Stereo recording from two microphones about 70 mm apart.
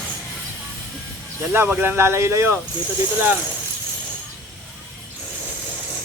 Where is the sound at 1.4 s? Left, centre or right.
Right.